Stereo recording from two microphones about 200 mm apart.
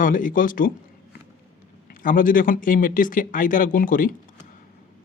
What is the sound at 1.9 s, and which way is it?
Speech, 45° left (ahead or behind).